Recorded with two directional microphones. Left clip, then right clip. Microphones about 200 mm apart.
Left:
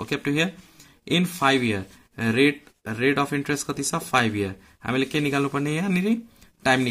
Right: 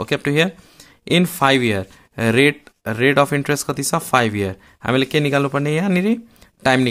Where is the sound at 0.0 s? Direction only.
35° right (ahead or behind).